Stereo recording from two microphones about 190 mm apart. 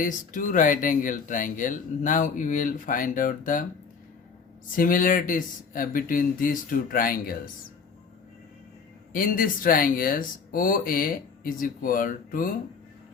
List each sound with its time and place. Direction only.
0.0 s speech: 45° left (ahead or behind)
4.7 s speech: 45° left (ahead or behind)
9.1 s speech: 50° left (ahead or behind)